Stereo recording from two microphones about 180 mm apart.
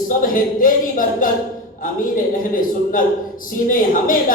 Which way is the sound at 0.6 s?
50° left (ahead or behind).